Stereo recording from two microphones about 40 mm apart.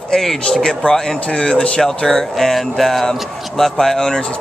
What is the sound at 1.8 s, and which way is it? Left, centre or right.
Speech, centre.